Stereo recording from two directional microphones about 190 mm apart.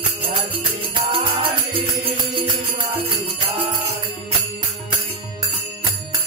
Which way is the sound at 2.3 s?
30° right (ahead or behind).